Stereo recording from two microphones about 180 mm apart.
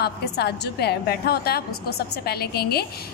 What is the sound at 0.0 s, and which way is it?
A woman's voice, 65° left (ahead or behind).